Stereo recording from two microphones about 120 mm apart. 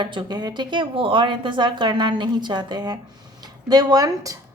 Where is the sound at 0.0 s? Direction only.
40° right (ahead or behind).